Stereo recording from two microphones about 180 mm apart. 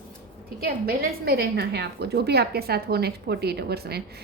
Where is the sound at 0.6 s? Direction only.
55° right (ahead or behind).